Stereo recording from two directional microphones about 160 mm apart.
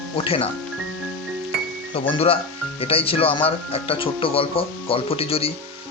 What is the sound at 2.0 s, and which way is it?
Speech, 35° left (ahead or behind).